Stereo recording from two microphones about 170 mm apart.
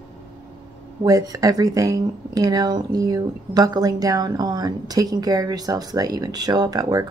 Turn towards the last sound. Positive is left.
turn(degrees=-20)  # may be behind; listen again after turning